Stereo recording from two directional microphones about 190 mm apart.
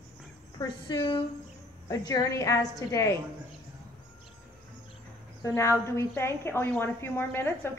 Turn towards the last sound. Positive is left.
turn(degrees=10)  # may be behind; listen again after turning